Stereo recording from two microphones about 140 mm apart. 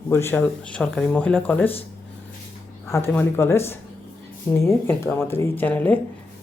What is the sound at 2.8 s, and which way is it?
Speech, 20° left (ahead or behind).